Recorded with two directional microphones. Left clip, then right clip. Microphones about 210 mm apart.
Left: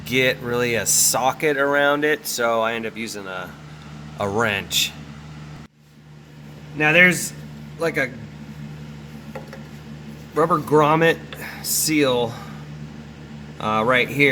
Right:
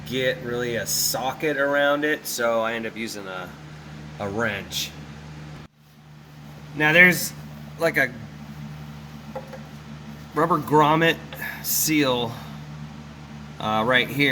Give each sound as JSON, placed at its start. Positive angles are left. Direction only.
{"t": 0.1, "sound": "a man's voice", "side_deg": 45}
{"t": 6.7, "sound": "speech", "side_deg": -5}
{"t": 10.3, "sound": "speech", "side_deg": 0}
{"t": 13.6, "sound": "speech", "side_deg": 5}